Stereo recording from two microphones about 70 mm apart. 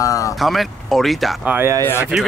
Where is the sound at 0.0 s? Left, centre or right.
Left.